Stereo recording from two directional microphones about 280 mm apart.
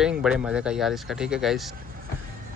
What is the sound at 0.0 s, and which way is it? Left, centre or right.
Speech, centre.